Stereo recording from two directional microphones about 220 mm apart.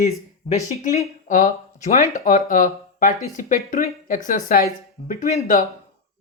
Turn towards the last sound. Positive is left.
turn(degrees=40)  # may be behind; listen again after turning